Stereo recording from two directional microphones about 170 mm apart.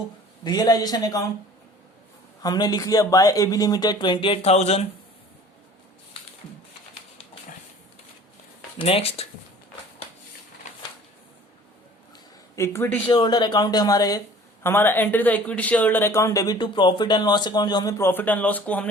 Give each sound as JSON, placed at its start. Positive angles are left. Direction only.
{"t": 0.4, "sound": "speech", "side_deg": 25}
{"t": 2.4, "sound": "speech", "side_deg": 25}
{"t": 8.8, "sound": "speech", "side_deg": 35}
{"t": 12.5, "sound": "speech", "side_deg": 15}
{"t": 13.1, "sound": "speech", "side_deg": 25}